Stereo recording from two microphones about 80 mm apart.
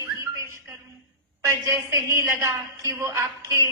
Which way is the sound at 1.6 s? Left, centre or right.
Right.